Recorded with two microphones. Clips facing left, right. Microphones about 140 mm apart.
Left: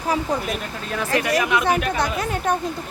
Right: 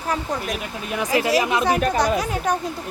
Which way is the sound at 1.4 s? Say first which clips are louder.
Even; 30° right (ahead or behind).